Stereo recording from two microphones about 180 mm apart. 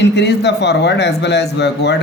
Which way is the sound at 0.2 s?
70° left (ahead or behind).